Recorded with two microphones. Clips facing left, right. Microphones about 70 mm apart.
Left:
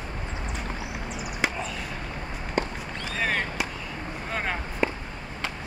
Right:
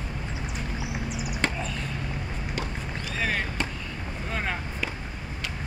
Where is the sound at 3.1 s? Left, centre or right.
Centre.